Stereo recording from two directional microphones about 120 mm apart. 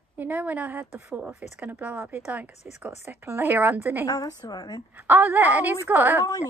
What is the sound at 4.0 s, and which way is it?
Speech, 30° left (ahead or behind).